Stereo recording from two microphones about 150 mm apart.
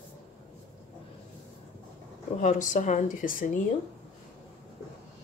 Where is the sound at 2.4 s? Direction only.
55° left (ahead or behind).